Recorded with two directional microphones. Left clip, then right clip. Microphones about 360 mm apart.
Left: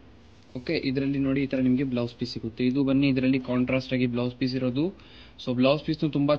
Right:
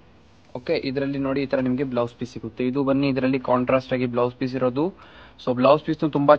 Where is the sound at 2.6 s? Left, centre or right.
Centre.